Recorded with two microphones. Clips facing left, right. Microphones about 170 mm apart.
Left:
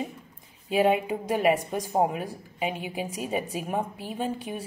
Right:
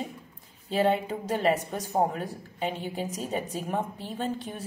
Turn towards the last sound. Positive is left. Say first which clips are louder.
# left 1 dB
turn(degrees=10)  # may be behind; listen again after turning